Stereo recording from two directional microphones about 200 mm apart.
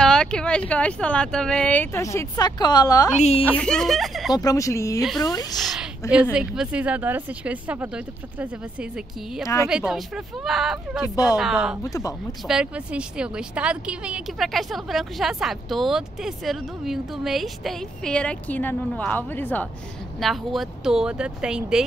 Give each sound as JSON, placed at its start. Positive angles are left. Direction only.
{"t": 0.0, "sound": "speech", "side_deg": 5}
{"t": 3.2, "sound": "a woman's voice", "side_deg": 30}
{"t": 3.4, "sound": "speech", "side_deg": 5}
{"t": 4.3, "sound": "speech", "side_deg": 20}
{"t": 5.7, "sound": "a sound", "side_deg": -5}
{"t": 6.3, "sound": "speech", "side_deg": -5}
{"t": 11.8, "sound": "speech", "side_deg": 15}
{"t": 12.4, "sound": "speech", "side_deg": -5}